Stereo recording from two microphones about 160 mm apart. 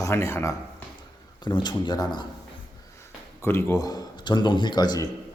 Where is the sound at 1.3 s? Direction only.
25° left (ahead or behind).